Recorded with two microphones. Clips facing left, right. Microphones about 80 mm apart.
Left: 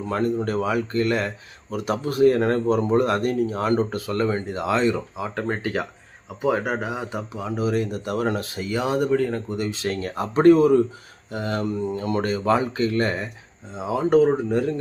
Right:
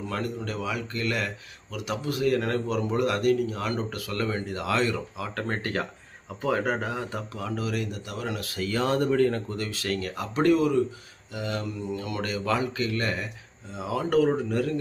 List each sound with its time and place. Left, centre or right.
0.1 s speech: left
8.4 s speech: left; by 9.4 s centre
9.5 s speech: centre